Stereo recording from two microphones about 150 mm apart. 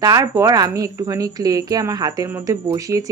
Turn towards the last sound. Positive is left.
turn(degrees=-20)  # may be behind; listen again after turning